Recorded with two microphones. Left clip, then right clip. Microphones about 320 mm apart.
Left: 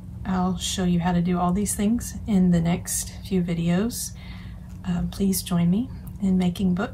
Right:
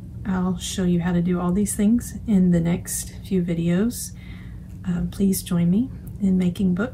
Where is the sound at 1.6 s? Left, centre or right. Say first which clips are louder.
Right 3 dB; centre.